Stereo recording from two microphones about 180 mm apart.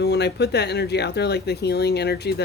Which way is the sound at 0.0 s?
65° left (ahead or behind).